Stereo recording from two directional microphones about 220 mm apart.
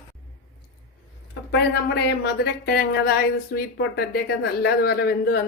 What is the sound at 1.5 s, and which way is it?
Speech, 50° left (ahead or behind).